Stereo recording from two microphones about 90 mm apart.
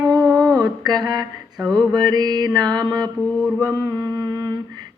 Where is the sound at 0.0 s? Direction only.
45° right (ahead or behind).